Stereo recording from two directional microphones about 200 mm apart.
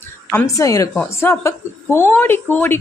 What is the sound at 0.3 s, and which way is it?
Speech, 15° left (ahead or behind).